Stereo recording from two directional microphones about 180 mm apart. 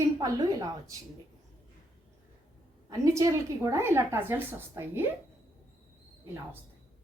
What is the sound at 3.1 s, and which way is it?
A woman's voice, 15° right (ahead or behind).